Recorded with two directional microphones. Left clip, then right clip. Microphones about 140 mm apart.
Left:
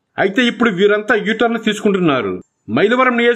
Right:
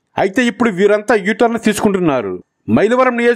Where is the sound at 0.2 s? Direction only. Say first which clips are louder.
Even; 40° right (ahead or behind).